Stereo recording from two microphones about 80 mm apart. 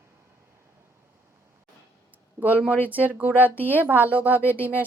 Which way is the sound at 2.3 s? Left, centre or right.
Right.